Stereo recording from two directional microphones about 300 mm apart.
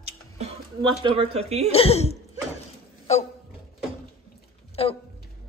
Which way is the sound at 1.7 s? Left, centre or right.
Centre.